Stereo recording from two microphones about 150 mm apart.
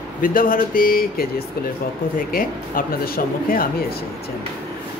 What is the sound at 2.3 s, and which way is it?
Speech, 70° left (ahead or behind).